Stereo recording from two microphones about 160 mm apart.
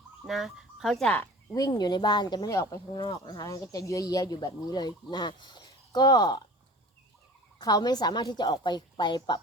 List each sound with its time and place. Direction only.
0.3 s speech: centre (ahead or behind)
1.5 s speech: 25° left (ahead or behind)
7.6 s speech: 25° left (ahead or behind)